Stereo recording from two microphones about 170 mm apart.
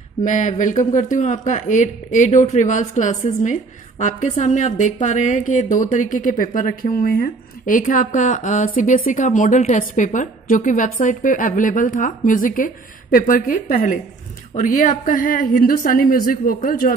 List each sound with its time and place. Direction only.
0.2 s a woman's voice: 50° left (ahead or behind)